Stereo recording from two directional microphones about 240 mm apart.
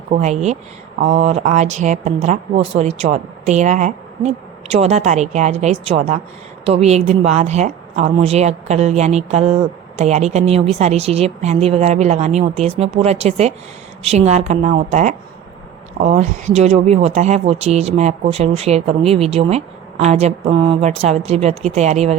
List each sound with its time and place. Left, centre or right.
0.1 s speech: right